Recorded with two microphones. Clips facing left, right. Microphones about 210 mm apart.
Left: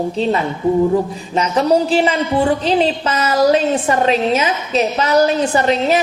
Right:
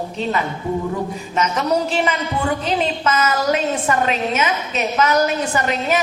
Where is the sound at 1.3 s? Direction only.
30° left (ahead or behind).